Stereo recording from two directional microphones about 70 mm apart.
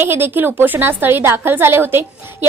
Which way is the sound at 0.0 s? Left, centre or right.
Right.